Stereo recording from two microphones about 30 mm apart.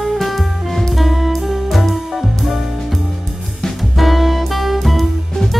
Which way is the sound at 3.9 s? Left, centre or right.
Centre.